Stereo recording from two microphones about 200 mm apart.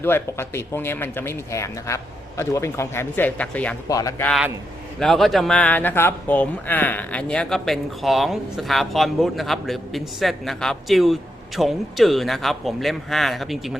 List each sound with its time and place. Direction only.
0.0 s speech: 10° left (ahead or behind)
3.8 s speech: 15° left (ahead or behind)
4.3 s speech: centre (ahead or behind)